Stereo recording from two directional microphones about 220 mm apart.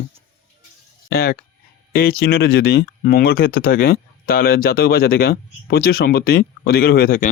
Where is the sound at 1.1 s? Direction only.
45° left (ahead or behind).